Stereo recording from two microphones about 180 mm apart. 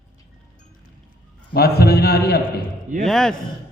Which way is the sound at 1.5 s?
60° left (ahead or behind).